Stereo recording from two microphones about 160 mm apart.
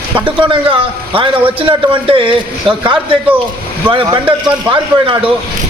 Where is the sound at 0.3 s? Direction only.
30° right (ahead or behind).